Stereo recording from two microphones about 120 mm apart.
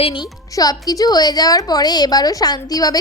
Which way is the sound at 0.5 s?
30° left (ahead or behind).